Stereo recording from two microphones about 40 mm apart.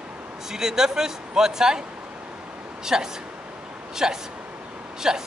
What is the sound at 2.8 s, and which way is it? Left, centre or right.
A man's voice, centre.